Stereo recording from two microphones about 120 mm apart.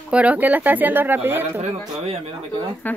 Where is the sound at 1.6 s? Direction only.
65° right (ahead or behind).